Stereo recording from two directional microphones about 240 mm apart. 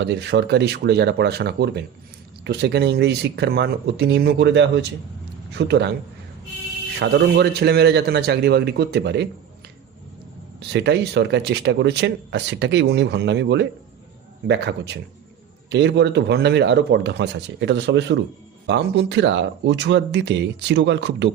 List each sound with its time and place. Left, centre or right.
0.0 s speech: right
7.0 s speech: right
10.6 s speech: right